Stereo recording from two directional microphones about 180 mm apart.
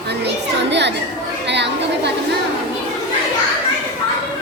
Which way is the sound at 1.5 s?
75° right (ahead or behind).